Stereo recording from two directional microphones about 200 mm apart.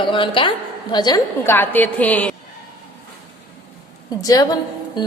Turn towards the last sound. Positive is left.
turn(degrees=20)  # may be behind; listen again after turning